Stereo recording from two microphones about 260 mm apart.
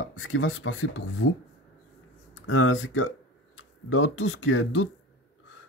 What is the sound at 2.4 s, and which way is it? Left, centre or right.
Speech, left.